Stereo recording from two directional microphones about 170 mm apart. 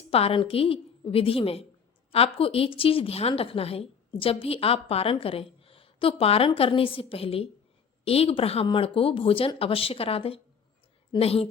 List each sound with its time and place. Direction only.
0.1 s a woman's voice: 35° left (ahead or behind)